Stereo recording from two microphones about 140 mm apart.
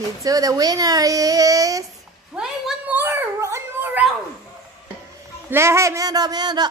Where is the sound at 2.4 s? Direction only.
10° right (ahead or behind).